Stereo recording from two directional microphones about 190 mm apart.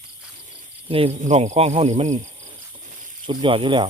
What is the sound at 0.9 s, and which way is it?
Speech, 30° right (ahead or behind).